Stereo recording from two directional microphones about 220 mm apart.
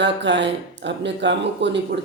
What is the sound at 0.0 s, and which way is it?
Speech, 50° right (ahead or behind).